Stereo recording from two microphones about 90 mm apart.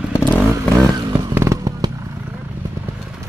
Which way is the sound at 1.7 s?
45° right (ahead or behind).